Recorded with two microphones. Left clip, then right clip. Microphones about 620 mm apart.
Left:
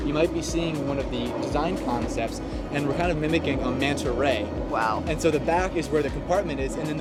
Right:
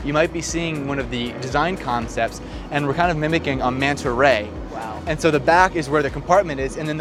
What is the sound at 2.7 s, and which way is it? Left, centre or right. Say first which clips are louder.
Speech: right 6 dB; right.